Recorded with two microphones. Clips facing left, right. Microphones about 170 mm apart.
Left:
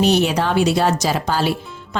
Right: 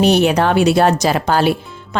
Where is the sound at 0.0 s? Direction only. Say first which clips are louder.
Right 4 dB; 60° right (ahead or behind).